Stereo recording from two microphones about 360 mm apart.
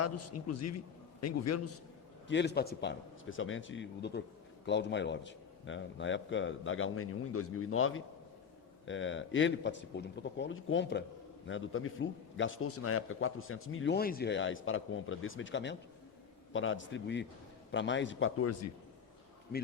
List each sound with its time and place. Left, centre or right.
0.0 s a man's voice: left
2.2 s a man's voice: left